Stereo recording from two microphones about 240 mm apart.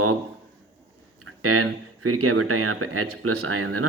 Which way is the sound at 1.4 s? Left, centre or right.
Right.